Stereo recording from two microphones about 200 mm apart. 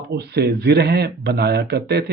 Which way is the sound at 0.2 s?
55° right (ahead or behind).